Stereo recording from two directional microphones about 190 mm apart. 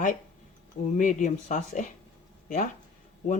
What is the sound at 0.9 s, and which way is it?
Speech, 40° left (ahead or behind).